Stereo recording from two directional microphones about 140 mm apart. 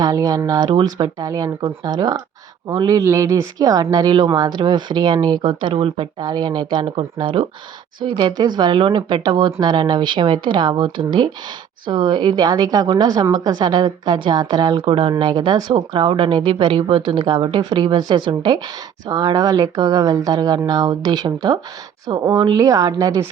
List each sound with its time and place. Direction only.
0.0 s speech: 25° right (ahead or behind)